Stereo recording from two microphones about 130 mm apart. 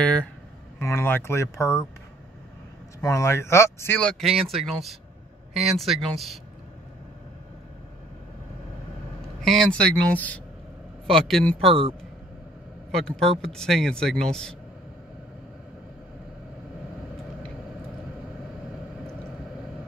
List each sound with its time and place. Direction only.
0.0 s speech: 10° left (ahead or behind)
3.0 s speech: 25° left (ahead or behind)
4.0 s speech: 5° left (ahead or behind)
5.5 s speech: centre (ahead or behind)
9.4 s speech: centre (ahead or behind)
11.6 s speech: 45° right (ahead or behind)
12.9 s speech: 5° left (ahead or behind)